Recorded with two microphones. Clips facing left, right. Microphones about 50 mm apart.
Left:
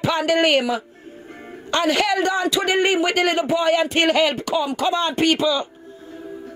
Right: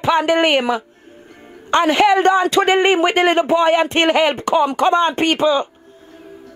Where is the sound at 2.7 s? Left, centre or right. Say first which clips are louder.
Right 4 dB; right.